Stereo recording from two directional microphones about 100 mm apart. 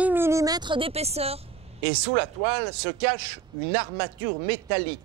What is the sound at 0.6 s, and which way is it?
Speech, 60° right (ahead or behind).